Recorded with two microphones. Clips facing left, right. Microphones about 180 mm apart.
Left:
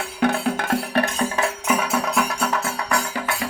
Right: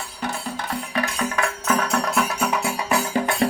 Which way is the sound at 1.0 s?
35° left (ahead or behind).